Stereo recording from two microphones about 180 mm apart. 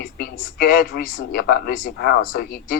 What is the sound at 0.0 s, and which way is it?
Speech, 55° left (ahead or behind).